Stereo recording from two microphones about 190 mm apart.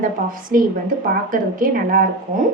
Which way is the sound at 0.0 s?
45° right (ahead or behind).